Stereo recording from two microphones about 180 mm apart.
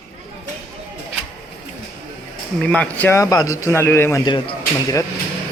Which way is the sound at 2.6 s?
5° left (ahead or behind).